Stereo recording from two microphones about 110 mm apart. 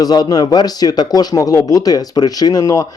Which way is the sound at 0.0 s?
35° left (ahead or behind).